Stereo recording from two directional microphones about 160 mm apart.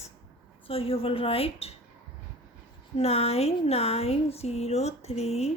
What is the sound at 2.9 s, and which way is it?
Speech, 40° left (ahead or behind).